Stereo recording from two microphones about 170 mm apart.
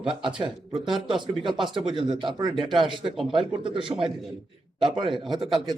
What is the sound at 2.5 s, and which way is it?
Speech, centre (ahead or behind).